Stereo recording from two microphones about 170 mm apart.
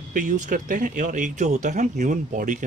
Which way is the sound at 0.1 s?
50° right (ahead or behind).